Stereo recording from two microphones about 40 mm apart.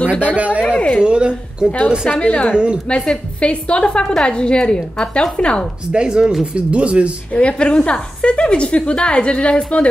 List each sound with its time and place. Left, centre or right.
0.2 s speech: right
0.7 s a sound: left
1.0 s speech: right
2.0 s a woman's voice: left
2.5 s speech: right
3.3 s a woman's voice: left
5.9 s speech: right
6.5 s speech: right
7.3 s a woman's voice: left